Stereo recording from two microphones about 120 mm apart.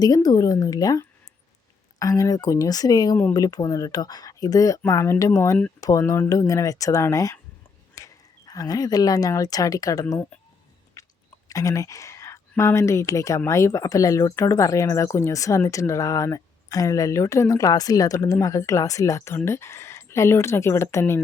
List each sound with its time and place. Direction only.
0.0 s speech: 30° left (ahead or behind)
11.0 s a sound: 25° left (ahead or behind)
11.4 s speech: 30° left (ahead or behind)